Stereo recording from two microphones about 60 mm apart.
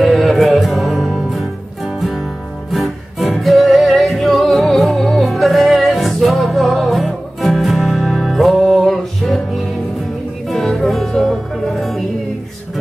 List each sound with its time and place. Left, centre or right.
0.0 s music: centre